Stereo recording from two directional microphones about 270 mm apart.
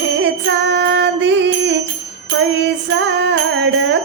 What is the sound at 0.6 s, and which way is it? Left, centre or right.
Child singing, right.